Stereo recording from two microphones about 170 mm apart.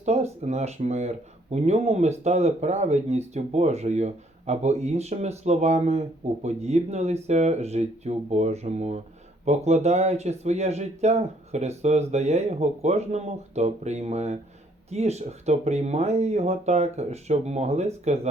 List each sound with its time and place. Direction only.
0.0 s speech: 40° right (ahead or behind)